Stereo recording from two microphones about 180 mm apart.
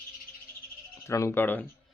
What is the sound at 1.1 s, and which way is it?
Speech, 15° left (ahead or behind).